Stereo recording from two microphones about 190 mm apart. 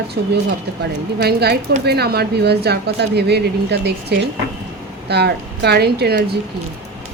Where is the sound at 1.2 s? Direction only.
60° right (ahead or behind).